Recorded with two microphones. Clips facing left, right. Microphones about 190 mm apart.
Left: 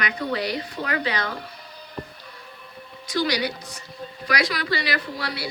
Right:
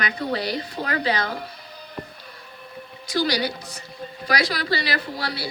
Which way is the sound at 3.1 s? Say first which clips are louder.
Right 1 dB; 30° right (ahead or behind).